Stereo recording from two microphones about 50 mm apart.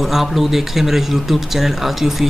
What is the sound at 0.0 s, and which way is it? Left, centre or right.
Speech, centre.